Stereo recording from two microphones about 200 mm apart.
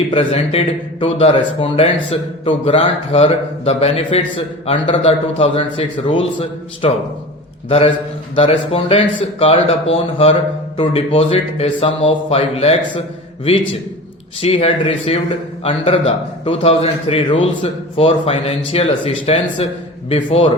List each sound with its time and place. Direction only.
0.1 s speech: 30° left (ahead or behind)
8.4 s speech: 30° left (ahead or behind)
14.4 s speech: 30° left (ahead or behind)